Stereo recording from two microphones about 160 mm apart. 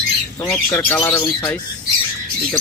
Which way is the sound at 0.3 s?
15° left (ahead or behind).